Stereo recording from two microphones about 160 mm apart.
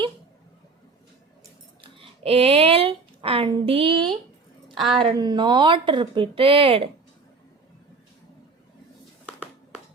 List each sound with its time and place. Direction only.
1.8 s speech: 35° right (ahead or behind)
4.7 s a woman's voice: centre (ahead or behind)
4.9 s speech: 25° right (ahead or behind)
9.2 s a sound: 10° right (ahead or behind)